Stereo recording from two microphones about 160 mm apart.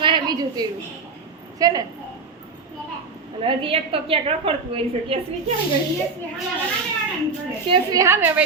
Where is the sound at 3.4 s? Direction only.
35° right (ahead or behind).